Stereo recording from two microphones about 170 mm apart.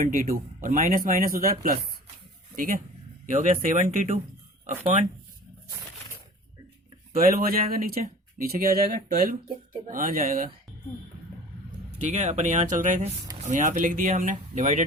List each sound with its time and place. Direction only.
0.0 s speech: 50° right (ahead or behind)
7.1 s speech: 60° right (ahead or behind)
11.9 s speech: 45° right (ahead or behind)